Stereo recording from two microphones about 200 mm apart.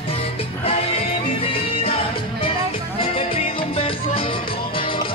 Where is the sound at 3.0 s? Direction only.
30° left (ahead or behind).